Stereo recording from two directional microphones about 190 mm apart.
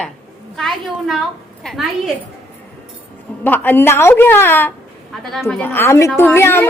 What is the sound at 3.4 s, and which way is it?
A woman's voice, 10° left (ahead or behind).